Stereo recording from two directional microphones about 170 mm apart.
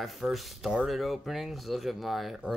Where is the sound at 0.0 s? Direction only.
Centre (ahead or behind).